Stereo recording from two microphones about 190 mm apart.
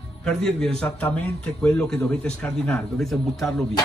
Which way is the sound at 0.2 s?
5° left (ahead or behind).